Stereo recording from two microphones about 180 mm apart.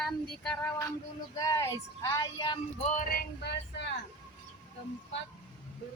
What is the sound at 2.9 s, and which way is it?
Music, 50° left (ahead or behind).